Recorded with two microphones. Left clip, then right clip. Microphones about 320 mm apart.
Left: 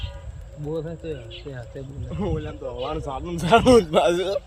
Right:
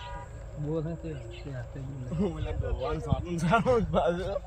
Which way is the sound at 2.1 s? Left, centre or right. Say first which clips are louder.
Left 5 dB; centre.